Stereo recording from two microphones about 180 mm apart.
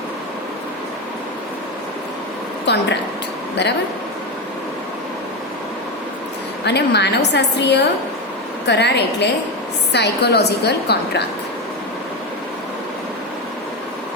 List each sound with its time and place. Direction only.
2.7 s a woman's voice: 70° left (ahead or behind)
6.7 s a woman's voice: 70° left (ahead or behind)